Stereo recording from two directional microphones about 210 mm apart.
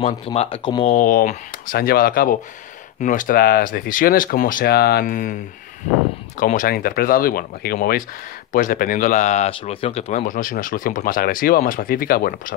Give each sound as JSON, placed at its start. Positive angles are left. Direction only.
{"t": 0.0, "sound": "speech", "side_deg": 30}
{"t": 0.9, "sound": "speech", "side_deg": 40}
{"t": 6.4, "sound": "speech", "side_deg": 40}